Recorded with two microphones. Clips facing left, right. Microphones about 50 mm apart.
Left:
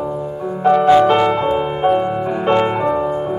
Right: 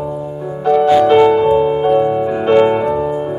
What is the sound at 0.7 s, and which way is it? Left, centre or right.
Music, centre.